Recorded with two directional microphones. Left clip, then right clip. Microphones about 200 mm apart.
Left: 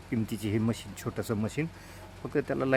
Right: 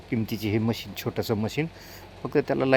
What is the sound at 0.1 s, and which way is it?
Speech, 5° left (ahead or behind).